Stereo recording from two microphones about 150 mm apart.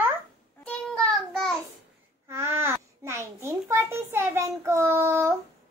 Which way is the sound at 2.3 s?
15° right (ahead or behind).